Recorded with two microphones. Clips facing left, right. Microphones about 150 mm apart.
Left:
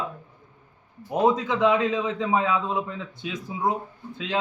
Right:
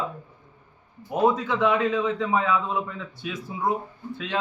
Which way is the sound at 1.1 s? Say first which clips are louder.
Even; 20° left (ahead or behind).